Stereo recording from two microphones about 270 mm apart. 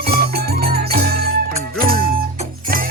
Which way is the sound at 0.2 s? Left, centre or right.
Right.